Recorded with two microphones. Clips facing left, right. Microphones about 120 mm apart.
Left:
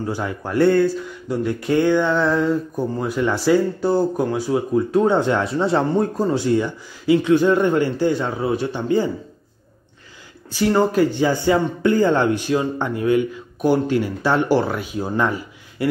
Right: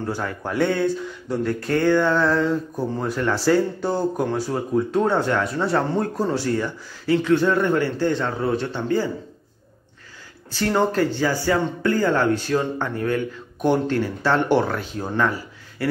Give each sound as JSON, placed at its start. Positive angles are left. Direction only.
{"t": 0.0, "sound": "speech", "side_deg": 10}
{"t": 5.1, "sound": "speech", "side_deg": 20}
{"t": 10.5, "sound": "speech", "side_deg": 5}
{"t": 15.2, "sound": "a sound", "side_deg": 20}